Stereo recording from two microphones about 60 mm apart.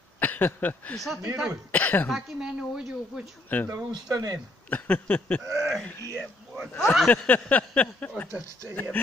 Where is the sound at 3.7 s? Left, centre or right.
Right.